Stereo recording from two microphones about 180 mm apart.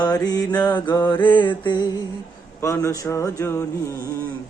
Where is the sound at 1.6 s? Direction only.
25° left (ahead or behind).